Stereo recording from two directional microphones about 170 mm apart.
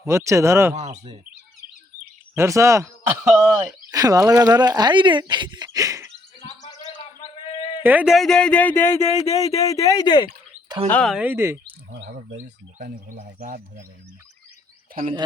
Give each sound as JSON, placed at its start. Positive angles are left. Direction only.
{"t": 0.0, "sound": "speech", "side_deg": -15}
{"t": 0.7, "sound": "speech", "side_deg": -45}
{"t": 2.3, "sound": "speech", "side_deg": -15}
{"t": 3.9, "sound": "speech", "side_deg": -20}
{"t": 7.2, "sound": "a sound", "side_deg": 30}
{"t": 7.8, "sound": "a man's voice", "side_deg": -10}
{"t": 9.0, "sound": "speech", "side_deg": 40}
{"t": 9.6, "sound": "speech", "side_deg": 20}
{"t": 10.8, "sound": "speech", "side_deg": 10}
{"t": 11.1, "sound": "speech", "side_deg": -10}
{"t": 12.4, "sound": "speech", "side_deg": -50}